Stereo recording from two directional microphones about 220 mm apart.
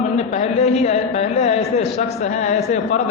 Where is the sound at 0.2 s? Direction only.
30° left (ahead or behind).